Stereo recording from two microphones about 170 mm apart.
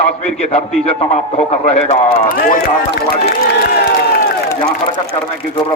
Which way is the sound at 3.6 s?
65° left (ahead or behind).